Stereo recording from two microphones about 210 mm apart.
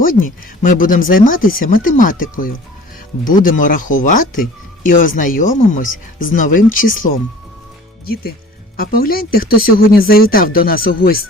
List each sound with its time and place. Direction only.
0.0 s speech: 40° left (ahead or behind)